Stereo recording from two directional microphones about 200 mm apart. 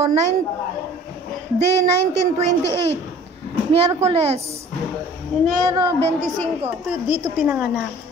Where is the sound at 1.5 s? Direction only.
35° right (ahead or behind).